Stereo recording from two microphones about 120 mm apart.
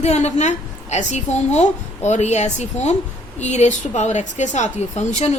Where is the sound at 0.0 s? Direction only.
70° left (ahead or behind).